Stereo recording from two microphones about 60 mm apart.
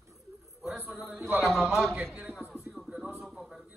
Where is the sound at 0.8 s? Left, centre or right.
Centre.